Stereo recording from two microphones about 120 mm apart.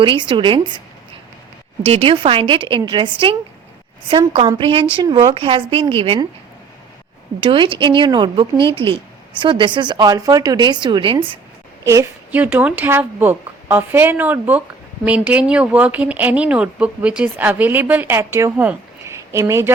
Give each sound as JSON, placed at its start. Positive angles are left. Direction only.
{"t": 0.0, "sound": "a woman's voice", "side_deg": -45}
{"t": 1.8, "sound": "a woman's voice", "side_deg": -55}
{"t": 4.5, "sound": "a woman's voice", "side_deg": -45}
{"t": 7.4, "sound": "a woman's voice", "side_deg": -45}
{"t": 12.3, "sound": "speech", "side_deg": -15}
{"t": 19.0, "sound": "a sound", "side_deg": -25}